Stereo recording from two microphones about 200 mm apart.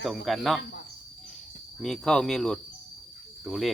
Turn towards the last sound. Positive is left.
turn(degrees=0)  # may be behind; listen again after turning